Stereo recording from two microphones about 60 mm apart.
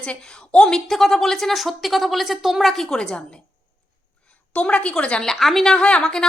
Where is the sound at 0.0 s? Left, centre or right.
Centre.